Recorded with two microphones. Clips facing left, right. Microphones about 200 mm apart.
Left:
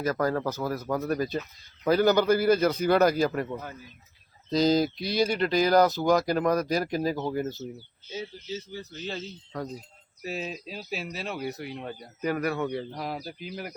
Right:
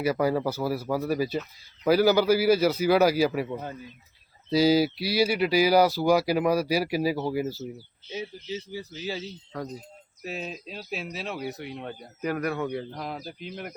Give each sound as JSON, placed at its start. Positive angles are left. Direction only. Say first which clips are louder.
{"t": 0.0, "sound": "speech", "louder": "right 2 dB", "side_deg": -10}